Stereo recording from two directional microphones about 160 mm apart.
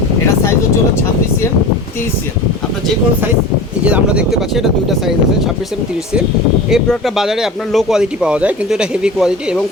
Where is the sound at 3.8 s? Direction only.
5° right (ahead or behind).